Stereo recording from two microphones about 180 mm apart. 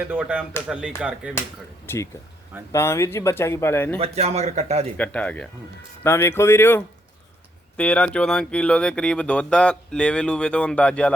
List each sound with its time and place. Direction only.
0.0 s speech: 10° right (ahead or behind)
1.9 s speech: 15° left (ahead or behind)
3.9 s speech: 35° right (ahead or behind)
4.9 s speech: 5° left (ahead or behind)